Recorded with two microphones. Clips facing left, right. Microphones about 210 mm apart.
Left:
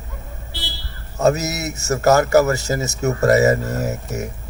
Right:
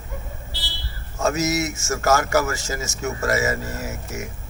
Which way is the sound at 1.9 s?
40° left (ahead or behind).